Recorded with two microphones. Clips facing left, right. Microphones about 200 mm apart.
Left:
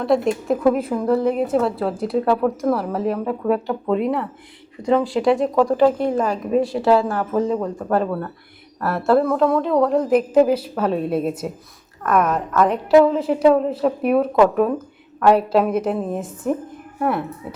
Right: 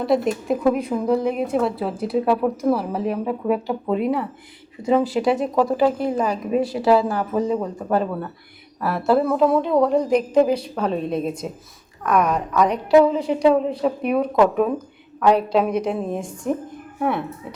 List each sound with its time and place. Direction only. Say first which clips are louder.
0.0 s a woman's voice: left 1 dB; centre (ahead or behind)